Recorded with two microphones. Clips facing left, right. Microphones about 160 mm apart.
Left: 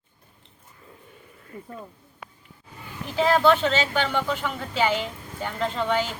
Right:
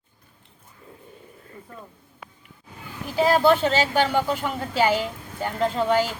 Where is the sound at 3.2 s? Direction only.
40° right (ahead or behind).